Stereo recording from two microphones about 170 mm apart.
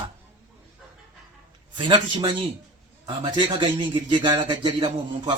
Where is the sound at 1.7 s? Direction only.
30° right (ahead or behind).